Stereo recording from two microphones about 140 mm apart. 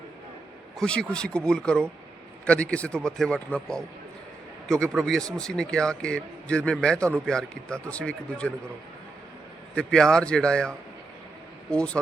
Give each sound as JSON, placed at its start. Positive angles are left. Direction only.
{"t": 0.8, "sound": "a man's voice", "side_deg": 5}
{"t": 9.7, "sound": "a man's voice", "side_deg": 5}